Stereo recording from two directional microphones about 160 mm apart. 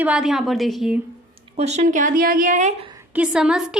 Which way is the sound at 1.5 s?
40° right (ahead or behind).